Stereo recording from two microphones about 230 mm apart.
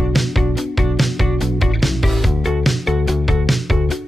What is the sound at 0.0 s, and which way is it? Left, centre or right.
Music, centre.